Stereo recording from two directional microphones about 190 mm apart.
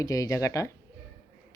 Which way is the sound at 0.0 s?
20° left (ahead or behind).